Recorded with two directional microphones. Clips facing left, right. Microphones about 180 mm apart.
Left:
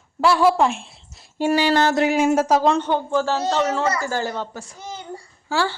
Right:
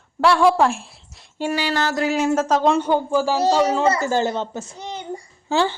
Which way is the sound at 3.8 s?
25° right (ahead or behind).